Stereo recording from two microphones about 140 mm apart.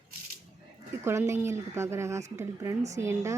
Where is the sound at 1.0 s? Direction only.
20° right (ahead or behind).